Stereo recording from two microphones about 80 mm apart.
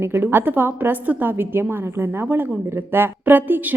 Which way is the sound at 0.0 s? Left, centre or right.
Right.